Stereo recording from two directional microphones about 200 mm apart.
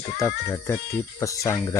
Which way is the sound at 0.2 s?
15° left (ahead or behind).